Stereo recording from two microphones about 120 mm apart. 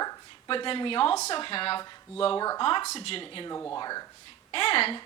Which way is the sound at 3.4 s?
25° left (ahead or behind).